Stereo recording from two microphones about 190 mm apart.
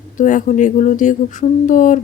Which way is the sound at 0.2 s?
40° left (ahead or behind).